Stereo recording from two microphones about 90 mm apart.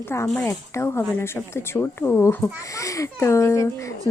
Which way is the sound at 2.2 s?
35° left (ahead or behind).